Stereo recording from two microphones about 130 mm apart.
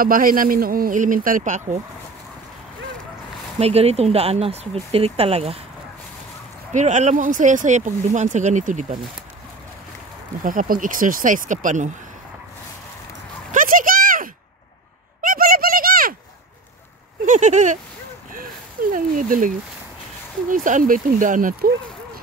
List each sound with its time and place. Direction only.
0.0 s speech: 90° right; by 1.8 s 70° right (ahead or behind)
3.5 s speech: 50° right (ahead or behind)
6.7 s speech: 70° right (ahead or behind)
10.4 s speech: 90° right; by 11.9 s 75° right (ahead or behind)
13.5 s a sound: 90° right
17.3 s speech: 70° right (ahead or behind)
18.3 s a sound: 90° right
20.4 s speech: 90° right